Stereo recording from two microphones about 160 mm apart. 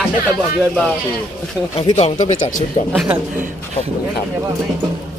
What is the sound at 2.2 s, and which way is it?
Speech, 50° left (ahead or behind).